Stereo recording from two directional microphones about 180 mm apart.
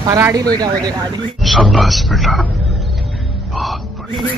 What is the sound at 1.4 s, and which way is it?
Speech, centre (ahead or behind).